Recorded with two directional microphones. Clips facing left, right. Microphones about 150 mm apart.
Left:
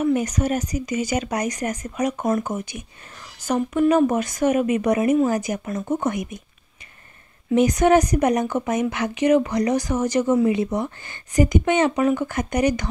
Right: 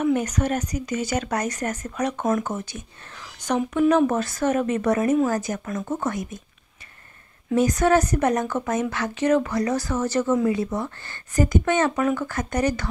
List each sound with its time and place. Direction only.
0.0 s speech: 10° left (ahead or behind)
7.5 s speech: 20° left (ahead or behind)